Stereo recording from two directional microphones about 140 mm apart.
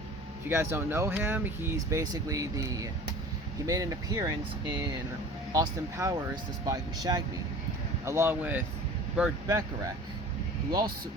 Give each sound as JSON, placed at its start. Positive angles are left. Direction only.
{"t": 0.4, "sound": "speech", "side_deg": -20}